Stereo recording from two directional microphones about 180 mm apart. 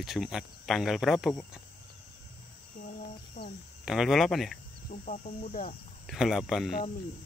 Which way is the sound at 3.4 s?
40° left (ahead or behind).